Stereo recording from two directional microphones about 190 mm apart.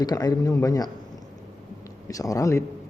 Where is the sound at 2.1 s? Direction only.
15° left (ahead or behind).